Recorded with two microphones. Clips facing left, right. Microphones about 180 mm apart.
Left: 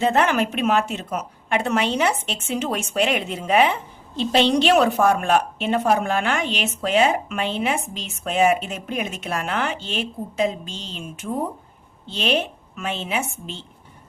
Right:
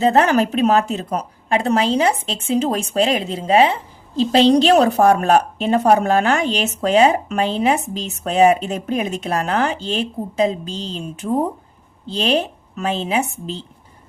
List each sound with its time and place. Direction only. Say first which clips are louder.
0.0 s a woman's voice: right 4 dB; 35° right (ahead or behind)